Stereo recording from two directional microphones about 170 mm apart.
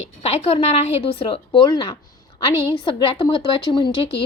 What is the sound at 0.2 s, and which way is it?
A woman's voice, 35° left (ahead or behind).